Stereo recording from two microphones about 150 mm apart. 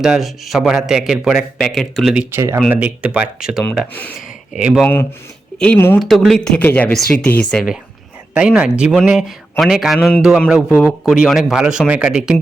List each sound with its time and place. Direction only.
0.0 s speech: centre (ahead or behind)
2.1 s speech: 15° right (ahead or behind)
5.5 s speech: 10° left (ahead or behind)
6.0 s speech: centre (ahead or behind)
8.3 s speech: 5° right (ahead or behind)